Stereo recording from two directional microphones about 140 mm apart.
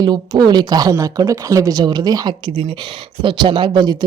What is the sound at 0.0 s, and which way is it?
Speech, 30° right (ahead or behind).